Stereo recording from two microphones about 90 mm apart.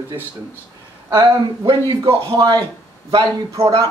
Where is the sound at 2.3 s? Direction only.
45° right (ahead or behind).